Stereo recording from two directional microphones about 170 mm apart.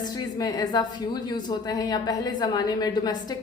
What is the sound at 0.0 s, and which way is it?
A woman's voice, 20° left (ahead or behind).